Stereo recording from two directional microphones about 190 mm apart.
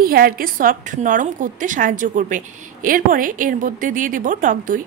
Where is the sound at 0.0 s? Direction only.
50° right (ahead or behind).